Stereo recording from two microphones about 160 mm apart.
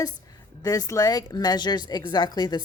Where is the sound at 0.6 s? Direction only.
25° left (ahead or behind).